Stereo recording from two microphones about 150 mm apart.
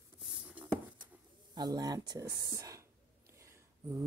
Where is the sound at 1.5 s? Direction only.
30° right (ahead or behind).